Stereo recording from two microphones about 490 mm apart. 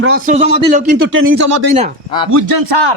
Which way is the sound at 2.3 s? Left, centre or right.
Right.